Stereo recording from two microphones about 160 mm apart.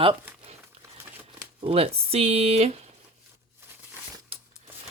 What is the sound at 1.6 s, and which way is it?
Speech, 40° right (ahead or behind).